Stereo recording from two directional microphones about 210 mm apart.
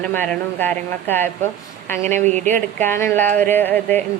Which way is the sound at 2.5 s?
10° left (ahead or behind).